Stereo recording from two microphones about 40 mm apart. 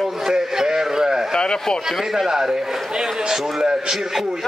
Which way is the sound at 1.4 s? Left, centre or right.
Left.